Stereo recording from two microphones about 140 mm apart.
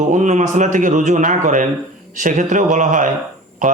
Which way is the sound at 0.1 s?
60° right (ahead or behind).